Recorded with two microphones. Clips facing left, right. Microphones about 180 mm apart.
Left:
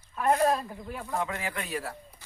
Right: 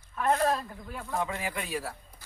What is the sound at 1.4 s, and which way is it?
Speech, 10° right (ahead or behind).